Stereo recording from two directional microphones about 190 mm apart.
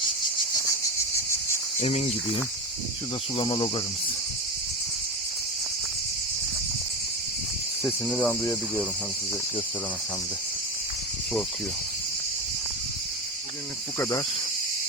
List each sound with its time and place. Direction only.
1.8 s speech: 35° left (ahead or behind)
8.0 s cricket: 5° left (ahead or behind)